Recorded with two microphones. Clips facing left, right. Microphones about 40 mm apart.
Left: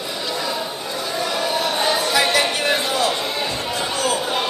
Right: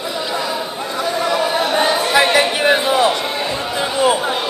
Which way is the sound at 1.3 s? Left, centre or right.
Centre.